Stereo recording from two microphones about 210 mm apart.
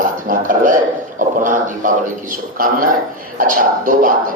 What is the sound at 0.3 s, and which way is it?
A man's voice, 40° right (ahead or behind).